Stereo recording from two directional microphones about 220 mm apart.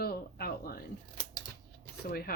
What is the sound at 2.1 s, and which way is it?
Speech, 40° left (ahead or behind).